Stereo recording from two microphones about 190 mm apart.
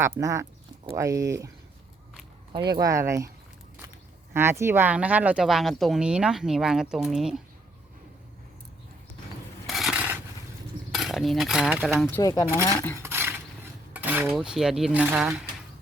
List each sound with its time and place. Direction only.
0.0 s speech: 15° right (ahead or behind)
2.7 s speech: 15° right (ahead or behind)
4.4 s speech: 15° right (ahead or behind)
9.6 s a sound: centre (ahead or behind)
10.9 s speech: centre (ahead or behind)
12.1 s speech: 20° left (ahead or behind)
12.6 s filing: 15° left (ahead or behind)
13.0 s a sound: 10° right (ahead or behind)
13.9 s speech: 10° right (ahead or behind)